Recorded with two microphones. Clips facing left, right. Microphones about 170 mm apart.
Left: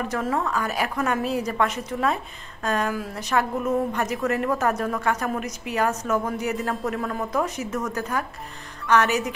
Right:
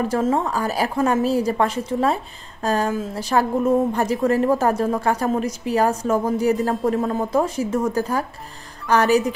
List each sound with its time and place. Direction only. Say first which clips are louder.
0.0 s a woman's voice: right 5 dB; 30° right (ahead or behind)